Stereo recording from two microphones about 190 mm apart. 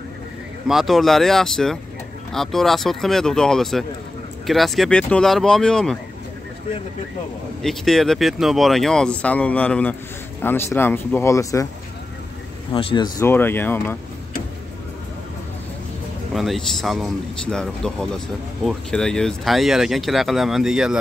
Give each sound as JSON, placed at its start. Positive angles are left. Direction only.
{"t": 0.7, "sound": "speech", "side_deg": 0}
{"t": 7.6, "sound": "speech", "side_deg": 0}
{"t": 12.7, "sound": "speech", "side_deg": 25}
{"t": 13.2, "sound": "speech", "side_deg": 10}
{"t": 16.3, "sound": "speech", "side_deg": 0}